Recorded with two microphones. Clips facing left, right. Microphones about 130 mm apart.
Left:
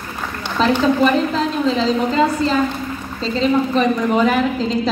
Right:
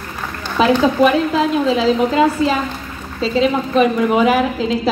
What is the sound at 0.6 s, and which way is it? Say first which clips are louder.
A woman's voice: right 2 dB; 5° right (ahead or behind).